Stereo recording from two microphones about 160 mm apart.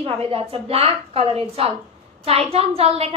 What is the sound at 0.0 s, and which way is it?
A woman's voice, 40° right (ahead or behind).